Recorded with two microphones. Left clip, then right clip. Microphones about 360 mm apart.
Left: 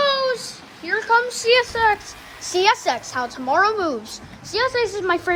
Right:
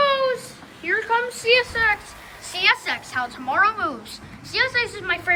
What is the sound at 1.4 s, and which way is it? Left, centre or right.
A woman's voice, centre.